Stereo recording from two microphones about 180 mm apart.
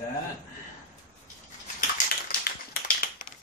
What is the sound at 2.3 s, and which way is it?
Typing, 55° left (ahead or behind).